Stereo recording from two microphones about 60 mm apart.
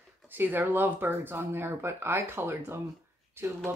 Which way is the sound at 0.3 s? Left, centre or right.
Right.